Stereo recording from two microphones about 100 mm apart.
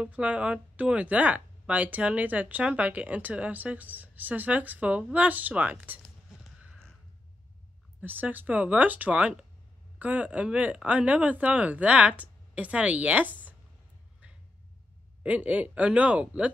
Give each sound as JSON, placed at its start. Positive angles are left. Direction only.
{"t": 0.0, "sound": "speech", "side_deg": -15}
{"t": 8.0, "sound": "speech", "side_deg": -20}
{"t": 15.2, "sound": "speech", "side_deg": -15}